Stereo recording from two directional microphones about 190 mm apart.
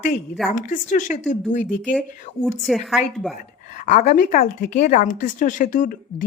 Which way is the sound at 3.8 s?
40° left (ahead or behind).